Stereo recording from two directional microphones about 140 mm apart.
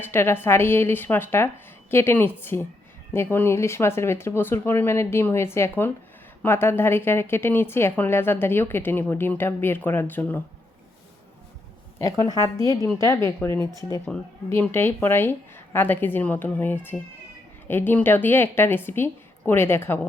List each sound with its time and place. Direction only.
0.0 s a woman's voice: 15° left (ahead or behind)
11.9 s a woman's voice: 25° left (ahead or behind)